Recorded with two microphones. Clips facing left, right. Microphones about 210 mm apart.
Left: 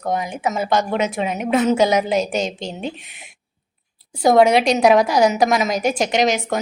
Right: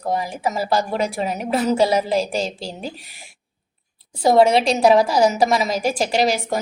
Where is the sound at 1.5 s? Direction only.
Centre (ahead or behind).